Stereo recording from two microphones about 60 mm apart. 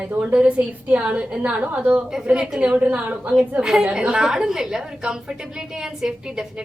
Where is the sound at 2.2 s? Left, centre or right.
Centre.